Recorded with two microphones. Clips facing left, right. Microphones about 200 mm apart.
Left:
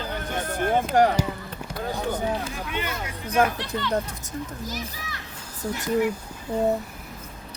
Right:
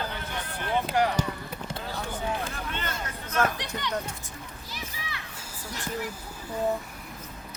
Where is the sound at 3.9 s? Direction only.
45° left (ahead or behind).